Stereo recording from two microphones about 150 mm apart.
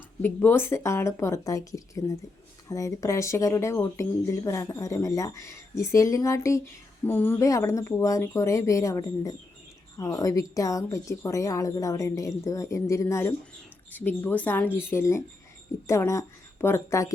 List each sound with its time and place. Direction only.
0.4 s speech: 15° left (ahead or behind)